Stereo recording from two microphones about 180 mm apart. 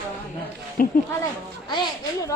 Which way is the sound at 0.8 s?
50° left (ahead or behind).